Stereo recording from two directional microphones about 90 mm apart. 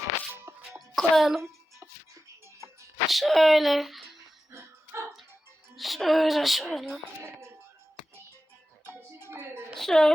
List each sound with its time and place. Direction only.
0.5 s music: 30° right (ahead or behind)
0.9 s speech: centre (ahead or behind)
2.6 s music: 30° right (ahead or behind)
3.1 s speech: centre (ahead or behind)
4.5 s dog: 30° right (ahead or behind)
5.7 s a child's voice: centre (ahead or behind)
7.3 s music: 30° right (ahead or behind)
8.8 s music: 25° right (ahead or behind)
9.7 s a woman's voice: 5° left (ahead or behind)